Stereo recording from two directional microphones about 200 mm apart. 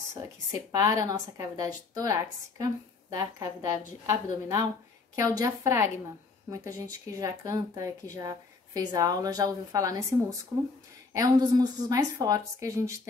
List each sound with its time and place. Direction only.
0.1 s speech: 15° right (ahead or behind)
11.1 s speech: 20° right (ahead or behind)